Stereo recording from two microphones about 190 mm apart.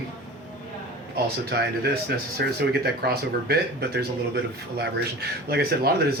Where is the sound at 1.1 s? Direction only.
55° right (ahead or behind).